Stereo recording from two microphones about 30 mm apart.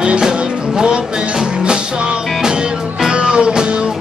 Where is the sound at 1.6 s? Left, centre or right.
Right.